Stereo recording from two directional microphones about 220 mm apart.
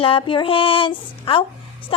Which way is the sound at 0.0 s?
25° left (ahead or behind).